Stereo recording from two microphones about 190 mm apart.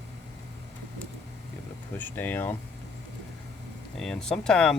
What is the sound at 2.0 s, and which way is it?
Speech, 10° left (ahead or behind).